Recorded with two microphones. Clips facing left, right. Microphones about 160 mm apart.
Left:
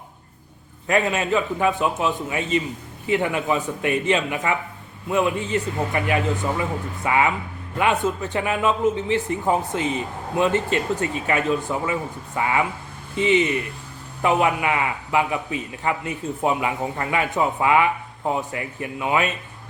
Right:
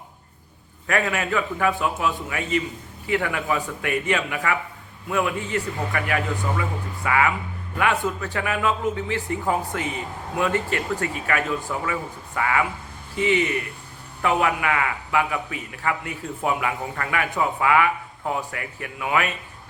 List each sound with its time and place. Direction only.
0.9 s a man's voice: 20° left (ahead or behind)